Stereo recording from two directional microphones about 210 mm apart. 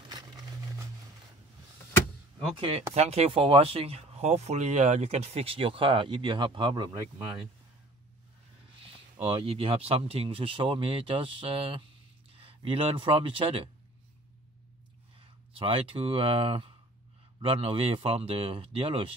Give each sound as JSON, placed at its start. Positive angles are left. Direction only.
{"t": 2.9, "sound": "speech", "side_deg": -30}
{"t": 8.8, "sound": "speech", "side_deg": -25}
{"t": 15.1, "sound": "speech", "side_deg": -25}